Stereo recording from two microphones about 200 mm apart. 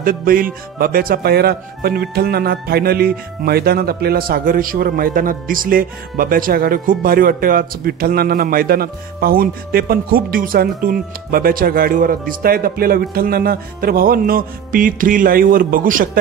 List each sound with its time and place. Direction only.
0.0 s speech: 45° right (ahead or behind)